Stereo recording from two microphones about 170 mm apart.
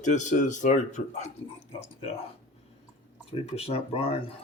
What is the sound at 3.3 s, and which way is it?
Speech, 35° left (ahead or behind).